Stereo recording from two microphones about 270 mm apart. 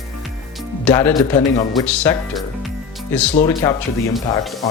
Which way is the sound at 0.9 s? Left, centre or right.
Centre.